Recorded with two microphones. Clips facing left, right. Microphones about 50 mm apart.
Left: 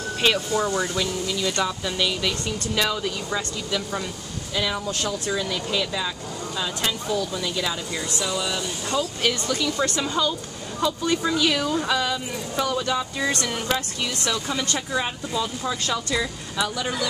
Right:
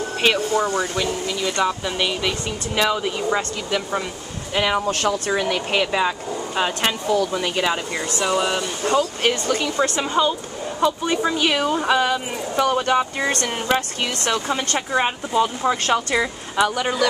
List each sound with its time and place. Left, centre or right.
0.6 s speech: right
4.6 s speech: right